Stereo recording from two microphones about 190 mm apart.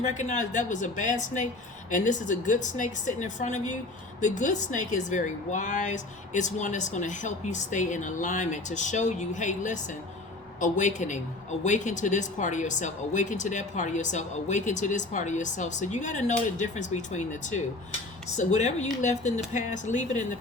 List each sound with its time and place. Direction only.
0.0 s speech: 40° left (ahead or behind)